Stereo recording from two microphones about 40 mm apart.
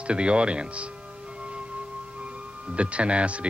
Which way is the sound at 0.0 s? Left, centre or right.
Right.